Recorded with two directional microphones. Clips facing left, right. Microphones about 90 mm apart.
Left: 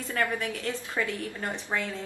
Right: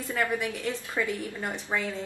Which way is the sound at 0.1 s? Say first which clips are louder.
Right 1 dB; 10° right (ahead or behind).